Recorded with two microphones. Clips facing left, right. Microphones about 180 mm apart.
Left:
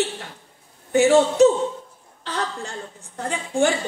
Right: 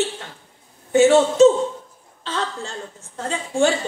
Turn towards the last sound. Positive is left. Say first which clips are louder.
# right 1 dB
turn(degrees=15)  # may be behind; listen again after turning